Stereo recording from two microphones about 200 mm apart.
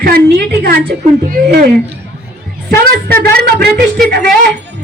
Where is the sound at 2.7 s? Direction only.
50° right (ahead or behind).